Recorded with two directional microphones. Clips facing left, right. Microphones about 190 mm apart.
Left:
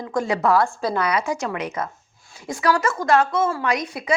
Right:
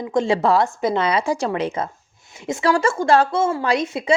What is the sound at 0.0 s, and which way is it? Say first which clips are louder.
A woman's voice: right 3 dB; 25° right (ahead or behind).